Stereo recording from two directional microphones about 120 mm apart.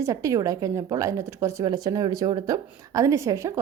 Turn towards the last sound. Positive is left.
turn(degrees=-25)  # may be behind; listen again after turning